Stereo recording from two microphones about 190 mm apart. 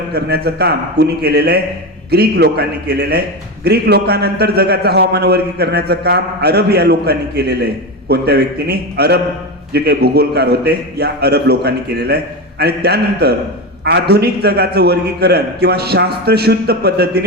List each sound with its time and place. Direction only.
0.1 s a man's voice: 55° right (ahead or behind)